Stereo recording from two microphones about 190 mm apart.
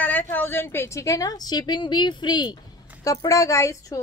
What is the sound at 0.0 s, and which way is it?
A woman's voice, 10° left (ahead or behind).